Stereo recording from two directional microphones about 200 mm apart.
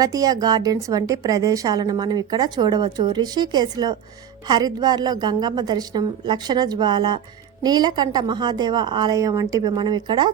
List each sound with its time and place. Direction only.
0.0 s a woman's voice: 15° right (ahead or behind)